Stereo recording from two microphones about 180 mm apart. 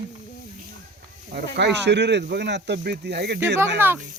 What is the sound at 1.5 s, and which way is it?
Speech, 70° right (ahead or behind).